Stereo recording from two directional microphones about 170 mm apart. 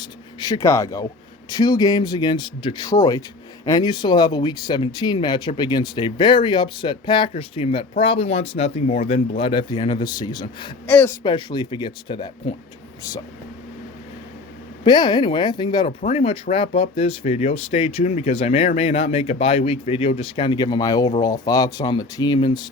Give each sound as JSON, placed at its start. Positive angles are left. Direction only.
{"t": 0.3, "sound": "speech", "side_deg": 25}
{"t": 10.8, "sound": "speech", "side_deg": 10}
{"t": 11.2, "sound": "speech", "side_deg": 30}
{"t": 14.8, "sound": "speech", "side_deg": 25}